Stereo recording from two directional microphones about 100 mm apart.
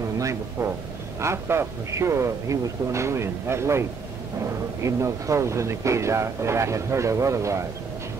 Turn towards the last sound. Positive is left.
turn(degrees=-30)  # may be behind; listen again after turning